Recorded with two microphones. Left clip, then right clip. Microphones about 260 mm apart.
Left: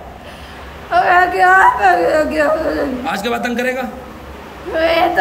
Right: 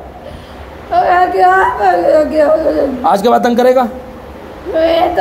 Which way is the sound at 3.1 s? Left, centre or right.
Centre.